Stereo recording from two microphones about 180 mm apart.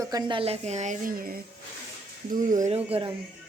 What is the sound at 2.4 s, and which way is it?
Speech, 45° right (ahead or behind).